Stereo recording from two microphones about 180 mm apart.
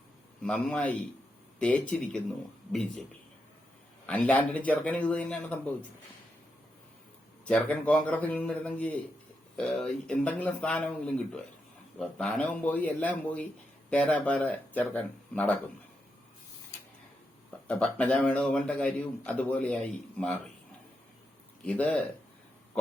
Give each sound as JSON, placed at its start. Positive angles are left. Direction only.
{"t": 0.4, "sound": "a man's voice", "side_deg": 5}
{"t": 4.0, "sound": "speech", "side_deg": 10}
{"t": 7.4, "sound": "speech", "side_deg": 10}
{"t": 17.7, "sound": "speech", "side_deg": 10}
{"t": 21.6, "sound": "speech", "side_deg": 5}